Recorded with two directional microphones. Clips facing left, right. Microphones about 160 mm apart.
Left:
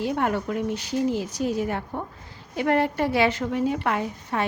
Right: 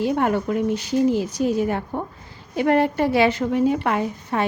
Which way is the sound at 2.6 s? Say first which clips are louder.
Right 4 dB; 20° right (ahead or behind).